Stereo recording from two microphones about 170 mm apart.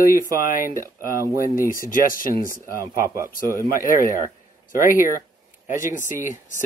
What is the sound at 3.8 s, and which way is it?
Speech, 55° left (ahead or behind).